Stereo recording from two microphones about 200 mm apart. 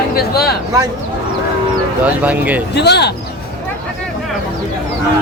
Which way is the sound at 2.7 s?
55° left (ahead or behind).